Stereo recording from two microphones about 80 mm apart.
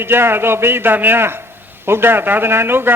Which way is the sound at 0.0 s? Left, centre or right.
Right.